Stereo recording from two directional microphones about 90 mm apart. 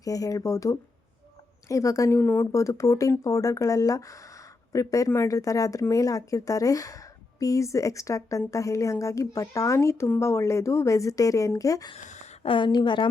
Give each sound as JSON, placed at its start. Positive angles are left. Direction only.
{"t": 0.0, "sound": "a woman's voice", "side_deg": 40}
{"t": 2.1, "sound": "speech", "side_deg": 25}
{"t": 2.5, "sound": "a woman's voice", "side_deg": 35}
{"t": 12.4, "sound": "a woman's voice", "side_deg": 75}